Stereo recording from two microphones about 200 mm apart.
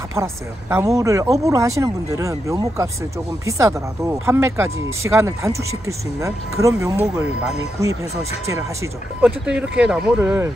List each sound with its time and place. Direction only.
0.1 s speech: 10° right (ahead or behind)